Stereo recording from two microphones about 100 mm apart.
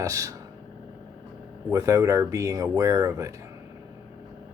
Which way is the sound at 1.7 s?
30° right (ahead or behind).